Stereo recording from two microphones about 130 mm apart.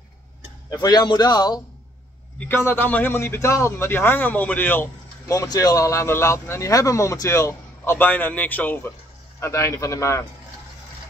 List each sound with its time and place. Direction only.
0.7 s a man's voice: 30° left (ahead or behind)
2.3 s a man's voice: 15° left (ahead or behind)
5.3 s speech: 25° left (ahead or behind)